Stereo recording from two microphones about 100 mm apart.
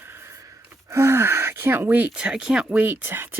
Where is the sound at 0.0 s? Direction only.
25° right (ahead or behind).